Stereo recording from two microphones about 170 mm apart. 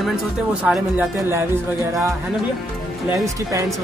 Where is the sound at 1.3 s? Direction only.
15° right (ahead or behind).